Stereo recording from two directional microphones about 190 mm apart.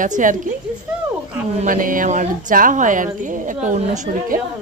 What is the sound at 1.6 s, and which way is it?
A woman's voice, 45° right (ahead or behind).